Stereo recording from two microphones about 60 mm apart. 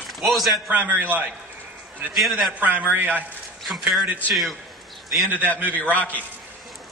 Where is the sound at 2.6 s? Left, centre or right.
Right.